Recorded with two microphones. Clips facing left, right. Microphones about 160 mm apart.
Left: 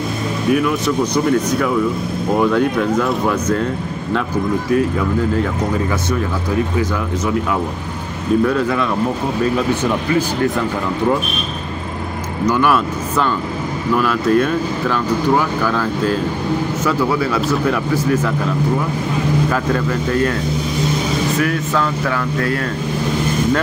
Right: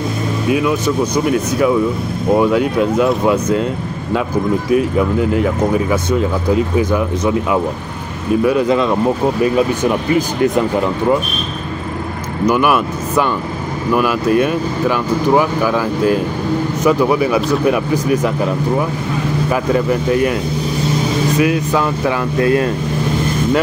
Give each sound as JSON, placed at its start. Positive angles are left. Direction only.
{"t": 0.5, "sound": "speech", "side_deg": -15}
{"t": 2.4, "sound": "speech", "side_deg": -15}
{"t": 5.3, "sound": "speech", "side_deg": -15}
{"t": 8.5, "sound": "speech", "side_deg": -20}
{"t": 12.4, "sound": "speech", "side_deg": -15}
{"t": 19.5, "sound": "speech", "side_deg": -15}
{"t": 21.4, "sound": "speech", "side_deg": -15}